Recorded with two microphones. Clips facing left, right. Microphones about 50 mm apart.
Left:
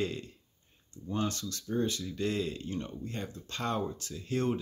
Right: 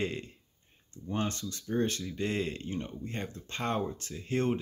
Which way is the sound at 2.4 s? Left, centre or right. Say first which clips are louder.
Even; right.